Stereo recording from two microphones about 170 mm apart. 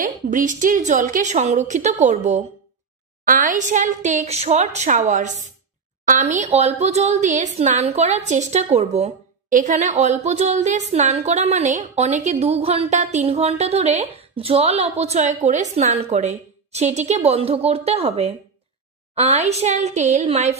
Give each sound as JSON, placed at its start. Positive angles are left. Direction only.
{"t": 0.0, "sound": "a woman's voice", "side_deg": -50}